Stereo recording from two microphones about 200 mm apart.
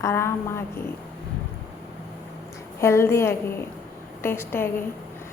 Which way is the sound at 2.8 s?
15° left (ahead or behind).